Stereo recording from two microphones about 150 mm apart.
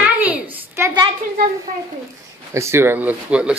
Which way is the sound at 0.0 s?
10° right (ahead or behind).